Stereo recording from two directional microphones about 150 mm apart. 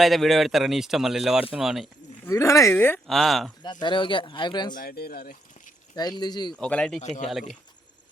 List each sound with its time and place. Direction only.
0.0 s speech: centre (ahead or behind)
2.2 s speech: 20° left (ahead or behind)
3.1 s speech: centre (ahead or behind)
3.6 s speech: 30° left (ahead or behind)
4.7 s speech: 80° left
6.0 s speech: 25° left (ahead or behind)
6.6 s speech: 5° left (ahead or behind)
7.0 s a man's voice: 50° left (ahead or behind)